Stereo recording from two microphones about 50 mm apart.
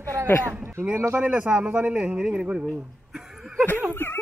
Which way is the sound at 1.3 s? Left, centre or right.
Right.